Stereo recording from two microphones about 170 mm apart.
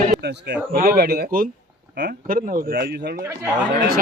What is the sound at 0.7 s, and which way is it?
Speech, 60° right (ahead or behind).